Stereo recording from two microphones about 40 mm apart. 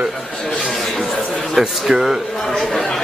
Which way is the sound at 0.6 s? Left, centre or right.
Centre.